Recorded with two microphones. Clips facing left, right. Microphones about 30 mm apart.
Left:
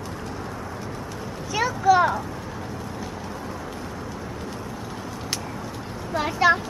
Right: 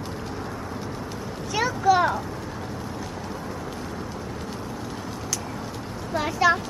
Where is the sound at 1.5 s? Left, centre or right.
Centre.